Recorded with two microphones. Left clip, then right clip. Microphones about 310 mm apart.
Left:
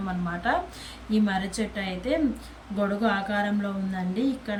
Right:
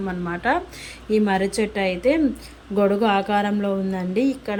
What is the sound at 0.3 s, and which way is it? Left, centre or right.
Speech, centre.